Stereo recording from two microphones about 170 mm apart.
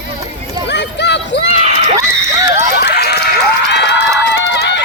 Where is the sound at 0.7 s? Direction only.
90° left.